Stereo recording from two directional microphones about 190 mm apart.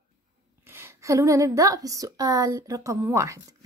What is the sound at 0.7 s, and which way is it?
A woman's voice, 15° right (ahead or behind).